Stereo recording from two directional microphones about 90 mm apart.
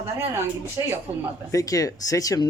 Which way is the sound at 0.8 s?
35° right (ahead or behind).